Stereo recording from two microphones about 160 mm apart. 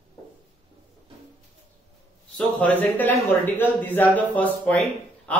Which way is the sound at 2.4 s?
10° left (ahead or behind).